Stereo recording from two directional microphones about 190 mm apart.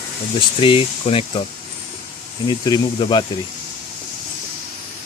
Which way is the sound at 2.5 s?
25° left (ahead or behind).